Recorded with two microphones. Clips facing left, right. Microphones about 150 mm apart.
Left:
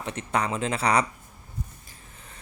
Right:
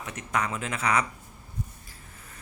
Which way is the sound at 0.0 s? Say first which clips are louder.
Left 3 dB; 30° left (ahead or behind).